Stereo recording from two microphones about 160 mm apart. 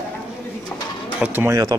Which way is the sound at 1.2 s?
15° right (ahead or behind).